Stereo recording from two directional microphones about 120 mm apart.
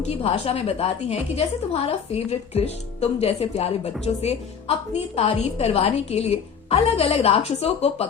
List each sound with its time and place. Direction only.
0.0 s a woman's voice: 55° left (ahead or behind)